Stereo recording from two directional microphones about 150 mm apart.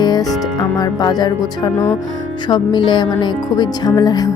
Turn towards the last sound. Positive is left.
turn(degrees=25)  # may be behind; listen again after turning